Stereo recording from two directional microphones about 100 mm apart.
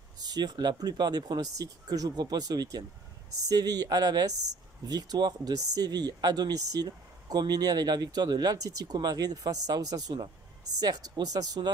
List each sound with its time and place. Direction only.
0.3 s speech: 45° right (ahead or behind)